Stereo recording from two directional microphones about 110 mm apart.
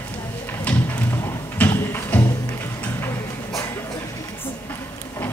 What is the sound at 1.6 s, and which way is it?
Music, 20° left (ahead or behind).